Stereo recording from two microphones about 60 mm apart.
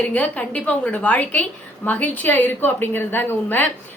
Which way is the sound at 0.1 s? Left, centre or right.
Left.